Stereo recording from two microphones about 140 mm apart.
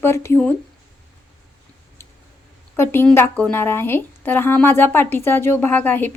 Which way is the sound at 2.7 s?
15° left (ahead or behind).